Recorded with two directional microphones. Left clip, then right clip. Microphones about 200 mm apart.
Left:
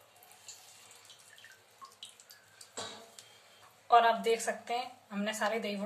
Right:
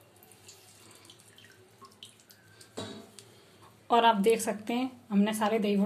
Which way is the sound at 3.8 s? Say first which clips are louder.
Right 2 dB; 35° right (ahead or behind).